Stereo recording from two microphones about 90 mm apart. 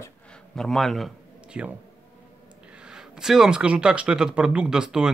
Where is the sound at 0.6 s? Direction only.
5° left (ahead or behind).